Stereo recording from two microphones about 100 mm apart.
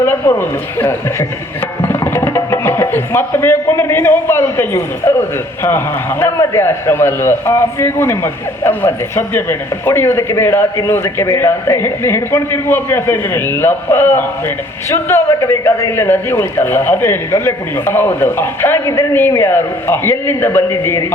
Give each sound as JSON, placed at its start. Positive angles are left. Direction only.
{"t": 0.0, "sound": "a man's voice", "side_deg": 20}